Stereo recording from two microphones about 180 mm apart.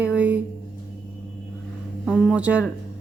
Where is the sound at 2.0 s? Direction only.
5° left (ahead or behind).